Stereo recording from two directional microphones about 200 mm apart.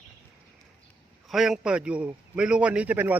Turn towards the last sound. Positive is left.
turn(degrees=-10)  # may be behind; listen again after turning